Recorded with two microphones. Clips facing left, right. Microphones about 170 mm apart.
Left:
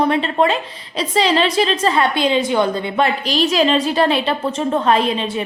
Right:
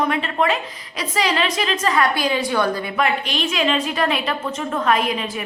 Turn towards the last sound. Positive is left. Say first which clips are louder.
# left 4 dB
turn(degrees=30)  # may be behind; listen again after turning